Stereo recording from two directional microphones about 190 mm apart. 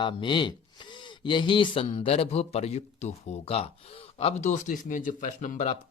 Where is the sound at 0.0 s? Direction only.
25° left (ahead or behind).